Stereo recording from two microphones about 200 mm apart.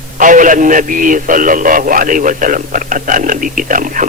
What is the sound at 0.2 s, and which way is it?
A man's voice, 40° right (ahead or behind).